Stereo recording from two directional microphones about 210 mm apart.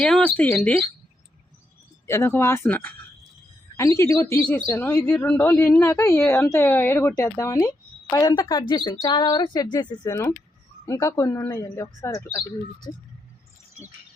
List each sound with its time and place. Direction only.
0.0 s speech: 5° left (ahead or behind)
2.0 s speech: 10° left (ahead or behind)
5.0 s speech: 5° left (ahead or behind)